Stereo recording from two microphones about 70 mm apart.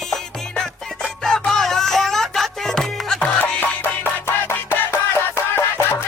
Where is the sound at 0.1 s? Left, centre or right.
Centre.